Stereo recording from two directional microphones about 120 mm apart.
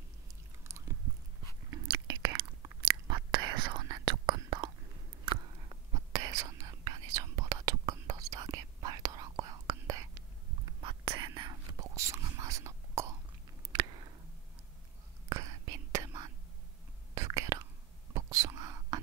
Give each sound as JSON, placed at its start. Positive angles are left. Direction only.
{"t": 0.7, "sound": "chewing", "side_deg": -25}
{"t": 1.9, "sound": "chewing", "side_deg": -40}
{"t": 2.9, "sound": "whispering", "side_deg": -40}
{"t": 6.1, "sound": "whispering", "side_deg": -30}
{"t": 11.9, "sound": "whispering", "side_deg": -25}
{"t": 15.2, "sound": "whispering", "side_deg": -30}